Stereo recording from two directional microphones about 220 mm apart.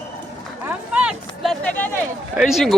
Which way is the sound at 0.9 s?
Centre (ahead or behind).